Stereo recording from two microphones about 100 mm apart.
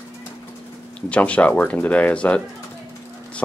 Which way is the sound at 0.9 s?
15° left (ahead or behind).